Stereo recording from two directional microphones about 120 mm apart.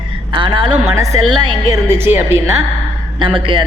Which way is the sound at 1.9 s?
20° right (ahead or behind).